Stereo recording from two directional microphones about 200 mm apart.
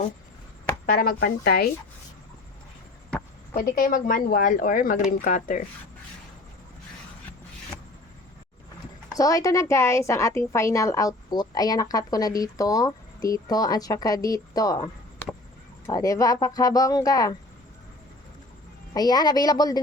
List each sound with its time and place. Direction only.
0.9 s speech: 45° left (ahead or behind)
3.5 s speech: 45° left (ahead or behind)
9.1 s a woman's voice: 15° left (ahead or behind)
15.9 s a woman's voice: 15° left (ahead or behind)
18.9 s speech: 20° left (ahead or behind)